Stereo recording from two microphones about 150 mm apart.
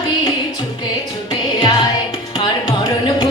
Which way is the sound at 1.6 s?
30° left (ahead or behind).